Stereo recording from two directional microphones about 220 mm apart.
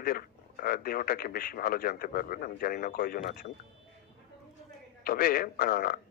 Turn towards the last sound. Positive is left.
turn(degrees=40)  # may be behind; listen again after turning